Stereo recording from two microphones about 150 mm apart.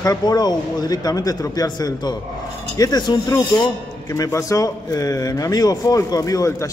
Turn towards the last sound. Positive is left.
turn(degrees=20)  # may be behind; listen again after turning